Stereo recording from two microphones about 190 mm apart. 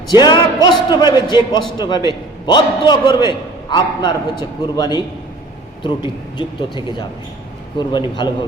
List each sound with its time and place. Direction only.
0.1 s a man's voice: 20° left (ahead or behind)
8.1 s a man's voice: 25° left (ahead or behind)